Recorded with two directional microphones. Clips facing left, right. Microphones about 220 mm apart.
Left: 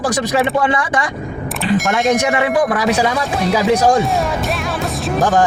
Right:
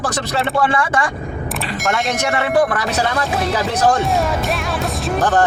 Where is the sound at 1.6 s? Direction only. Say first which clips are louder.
Left 7 dB; centre (ahead or behind).